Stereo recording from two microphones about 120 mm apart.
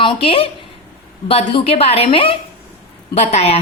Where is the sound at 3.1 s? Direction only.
65° left (ahead or behind).